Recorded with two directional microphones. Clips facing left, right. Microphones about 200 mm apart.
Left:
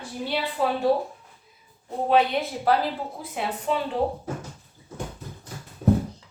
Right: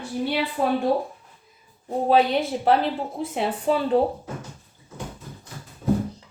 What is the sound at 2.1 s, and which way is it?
A woman's voice, 30° right (ahead or behind).